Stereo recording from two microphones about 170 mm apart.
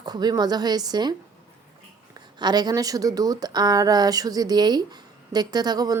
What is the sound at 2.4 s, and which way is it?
A woman's voice, 25° right (ahead or behind).